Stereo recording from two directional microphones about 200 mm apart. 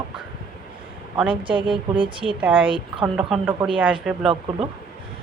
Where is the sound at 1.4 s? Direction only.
25° right (ahead or behind).